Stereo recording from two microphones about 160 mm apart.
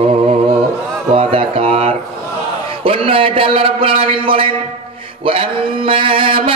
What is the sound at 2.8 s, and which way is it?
A man's voice, 35° right (ahead or behind).